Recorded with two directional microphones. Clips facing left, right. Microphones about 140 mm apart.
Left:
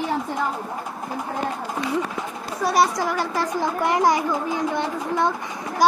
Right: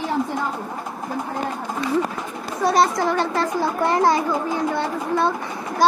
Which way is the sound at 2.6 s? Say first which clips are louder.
Right 2 dB; 10° left (ahead or behind).